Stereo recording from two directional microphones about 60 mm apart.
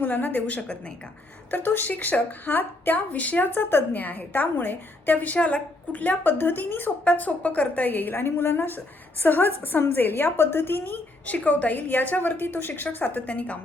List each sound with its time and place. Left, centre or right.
0.0 s a woman's voice: left